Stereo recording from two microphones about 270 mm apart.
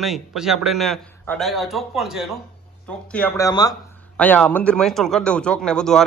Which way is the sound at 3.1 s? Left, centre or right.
Centre.